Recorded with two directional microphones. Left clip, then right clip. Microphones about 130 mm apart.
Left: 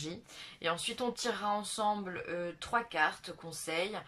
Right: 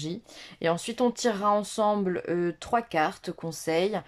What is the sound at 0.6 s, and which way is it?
Speech, 55° right (ahead or behind).